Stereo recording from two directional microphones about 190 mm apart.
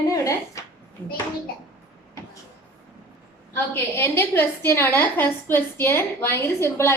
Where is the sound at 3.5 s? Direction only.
15° left (ahead or behind).